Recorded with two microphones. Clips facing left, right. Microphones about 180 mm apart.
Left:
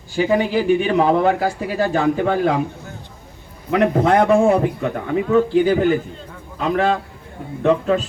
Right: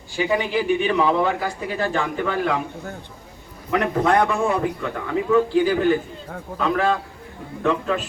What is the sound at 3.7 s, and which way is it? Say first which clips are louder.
A man's voice: left 4 dB; 30° left (ahead or behind).